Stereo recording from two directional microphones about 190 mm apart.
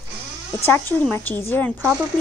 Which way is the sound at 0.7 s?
10° left (ahead or behind).